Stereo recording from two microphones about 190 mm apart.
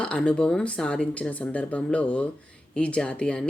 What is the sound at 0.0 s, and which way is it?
Speech, 5° left (ahead or behind).